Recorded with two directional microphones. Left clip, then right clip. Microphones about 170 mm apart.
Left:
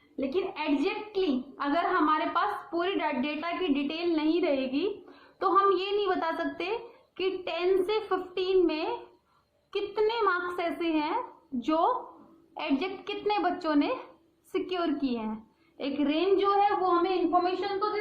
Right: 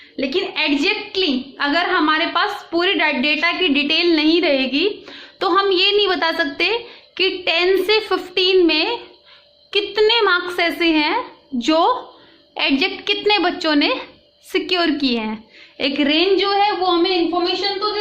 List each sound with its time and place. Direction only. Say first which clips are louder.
0.2 s a woman's voice: right 11 dB; 20° right (ahead or behind)